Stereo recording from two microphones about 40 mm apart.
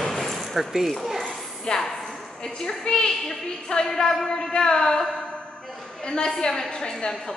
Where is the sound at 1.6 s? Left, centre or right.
Centre.